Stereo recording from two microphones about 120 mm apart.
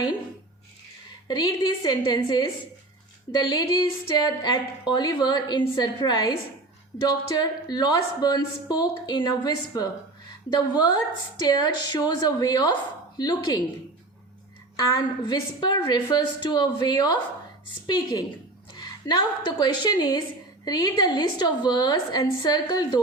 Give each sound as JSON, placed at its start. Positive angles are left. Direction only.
{"t": 1.3, "sound": "a woman's voice", "side_deg": 40}
{"t": 14.9, "sound": "a woman's voice", "side_deg": 35}
{"t": 22.4, "sound": "a woman's voice", "side_deg": 35}